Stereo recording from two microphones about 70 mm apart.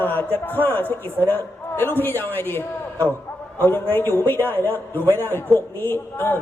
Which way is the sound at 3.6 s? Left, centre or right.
Left.